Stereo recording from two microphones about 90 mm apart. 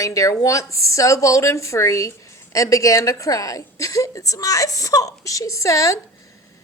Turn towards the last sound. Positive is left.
turn(degrees=40)  # may be behind; listen again after turning